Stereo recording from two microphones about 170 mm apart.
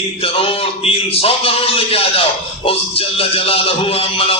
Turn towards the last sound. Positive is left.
turn(degrees=35)  # may be behind; listen again after turning